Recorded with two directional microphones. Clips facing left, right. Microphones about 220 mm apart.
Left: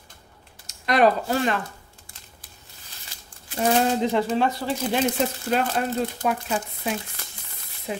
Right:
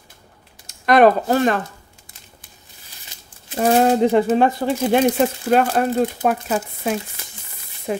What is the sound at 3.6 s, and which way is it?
Speech, 60° right (ahead or behind).